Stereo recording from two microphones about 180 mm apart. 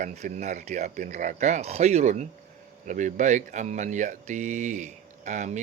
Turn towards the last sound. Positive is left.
turn(degrees=-40)  # may be behind; listen again after turning